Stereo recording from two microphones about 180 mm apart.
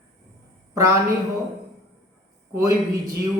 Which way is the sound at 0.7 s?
15° right (ahead or behind).